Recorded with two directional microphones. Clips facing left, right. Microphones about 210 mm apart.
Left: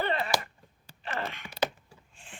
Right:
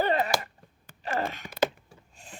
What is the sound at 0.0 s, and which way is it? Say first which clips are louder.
Finger snapping: right 5 dB; 40° right (ahead or behind).